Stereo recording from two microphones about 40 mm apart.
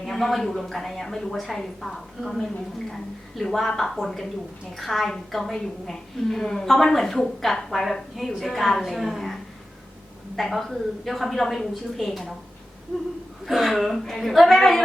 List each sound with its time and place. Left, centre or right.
0.0 s a woman's voice: centre
13.4 s a woman's voice: centre